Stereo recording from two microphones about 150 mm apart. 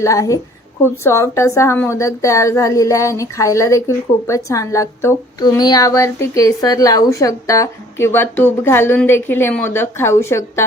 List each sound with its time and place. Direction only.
0.0 s a woman's voice: 20° left (ahead or behind)